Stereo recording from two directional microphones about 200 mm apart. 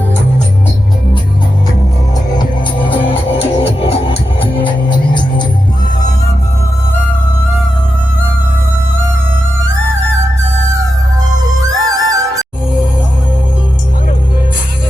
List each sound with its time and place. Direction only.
2.9 s music: 25° left (ahead or behind)
11.6 s music: 15° right (ahead or behind)